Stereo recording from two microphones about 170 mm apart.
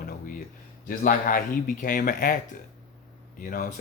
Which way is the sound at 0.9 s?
55° left (ahead or behind).